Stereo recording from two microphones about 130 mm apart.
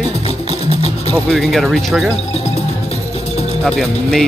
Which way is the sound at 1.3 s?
Centre (ahead or behind).